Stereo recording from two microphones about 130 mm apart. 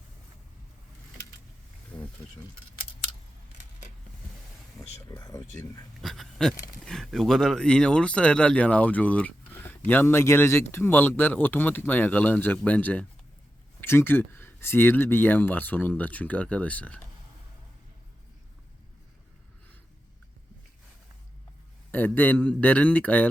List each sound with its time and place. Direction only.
5.0 s speech: 30° left (ahead or behind)
6.0 s speech: centre (ahead or behind)
21.9 s speech: 15° left (ahead or behind)